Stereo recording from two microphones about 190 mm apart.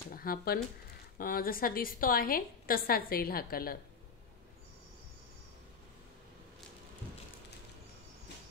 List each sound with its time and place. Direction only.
0.1 s a woman's voice: 50° left (ahead or behind)